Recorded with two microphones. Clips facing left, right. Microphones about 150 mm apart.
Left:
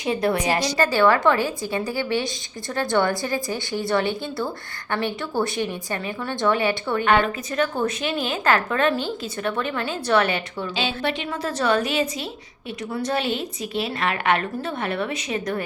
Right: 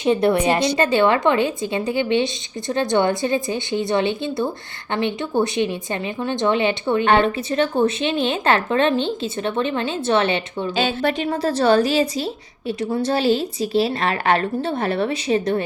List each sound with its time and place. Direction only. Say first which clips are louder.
0.0 s a woman's voice: right 5 dB; 25° right (ahead or behind)
10.8 s a woman's voice: right 5 dB; 45° right (ahead or behind)